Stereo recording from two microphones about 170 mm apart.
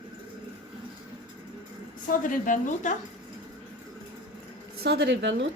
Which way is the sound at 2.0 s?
50° left (ahead or behind).